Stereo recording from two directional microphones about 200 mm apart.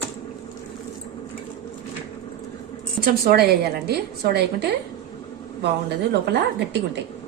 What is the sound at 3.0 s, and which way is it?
A woman's voice, 50° right (ahead or behind).